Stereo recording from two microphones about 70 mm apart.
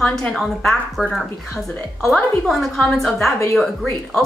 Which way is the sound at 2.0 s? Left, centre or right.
Centre.